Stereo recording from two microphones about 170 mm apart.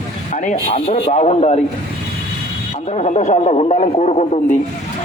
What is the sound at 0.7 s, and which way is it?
Speech, 40° left (ahead or behind).